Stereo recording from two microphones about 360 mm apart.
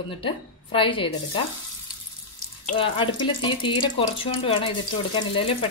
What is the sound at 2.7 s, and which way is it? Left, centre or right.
Speech, centre.